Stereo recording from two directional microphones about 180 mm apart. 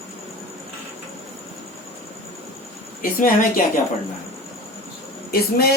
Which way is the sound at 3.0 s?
50° left (ahead or behind).